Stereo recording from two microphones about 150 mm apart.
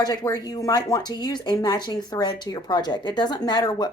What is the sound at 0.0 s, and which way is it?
Speech, 25° left (ahead or behind).